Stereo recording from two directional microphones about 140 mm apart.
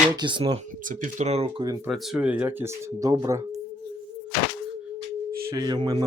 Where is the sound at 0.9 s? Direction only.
70° right (ahead or behind).